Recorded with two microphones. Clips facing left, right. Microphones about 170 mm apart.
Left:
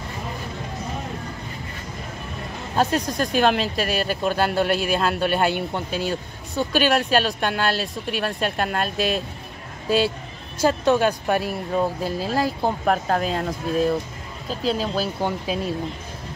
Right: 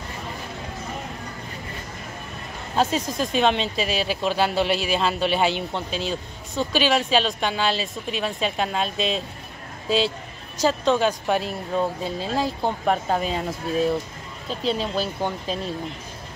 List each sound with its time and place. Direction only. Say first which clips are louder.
2.7 s speech: left 1 dB; centre (ahead or behind)
4.6 s a man's voice: left 2 dB; 55° left (ahead or behind)
4.9 s speech: left 1 dB; centre (ahead or behind)
10.7 s speech: left 2 dB; 5° left (ahead or behind)